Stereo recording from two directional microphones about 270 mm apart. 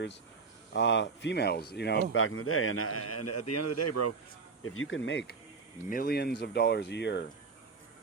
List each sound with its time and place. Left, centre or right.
0.7 s speech: left
4.6 s speech: left